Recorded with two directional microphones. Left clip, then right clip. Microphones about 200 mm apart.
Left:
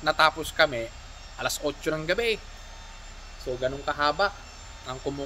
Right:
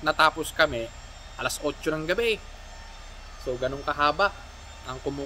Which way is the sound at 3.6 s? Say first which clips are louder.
Right 1 dB; 10° right (ahead or behind).